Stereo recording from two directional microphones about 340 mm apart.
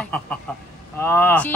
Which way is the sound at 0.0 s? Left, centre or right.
Centre.